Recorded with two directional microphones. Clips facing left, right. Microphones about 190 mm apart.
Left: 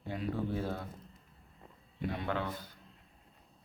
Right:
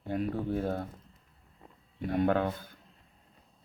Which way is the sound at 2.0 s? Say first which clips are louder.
Right 8 dB; 45° right (ahead or behind).